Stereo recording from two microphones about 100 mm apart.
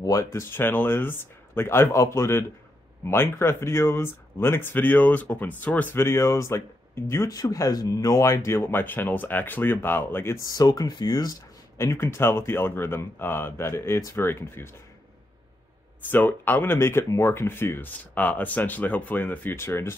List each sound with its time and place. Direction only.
0.0 s speech: 30° left (ahead or behind)
10.4 s speech: 40° left (ahead or behind)
11.8 s speech: 30° left (ahead or behind)
16.0 s speech: 15° left (ahead or behind)